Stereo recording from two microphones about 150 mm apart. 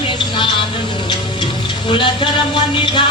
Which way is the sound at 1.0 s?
30° left (ahead or behind).